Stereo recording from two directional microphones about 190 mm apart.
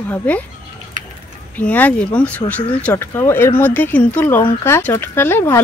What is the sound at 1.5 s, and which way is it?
Speech, 10° left (ahead or behind).